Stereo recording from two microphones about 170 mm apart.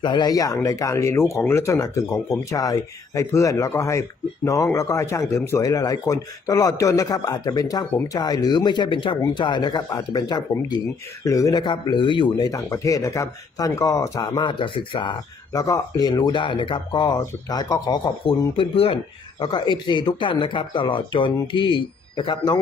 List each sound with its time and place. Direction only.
0.0 s speech: 25° left (ahead or behind)